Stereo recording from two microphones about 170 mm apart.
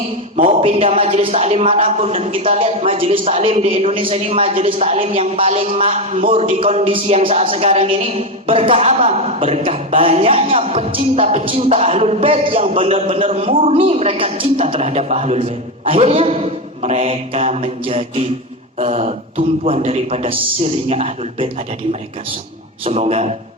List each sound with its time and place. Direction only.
0.4 s speech: 35° right (ahead or behind)
22.8 s speech: 35° right (ahead or behind)